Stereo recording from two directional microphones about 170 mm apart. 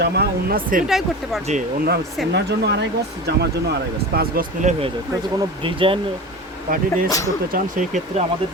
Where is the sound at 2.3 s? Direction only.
75° right (ahead or behind).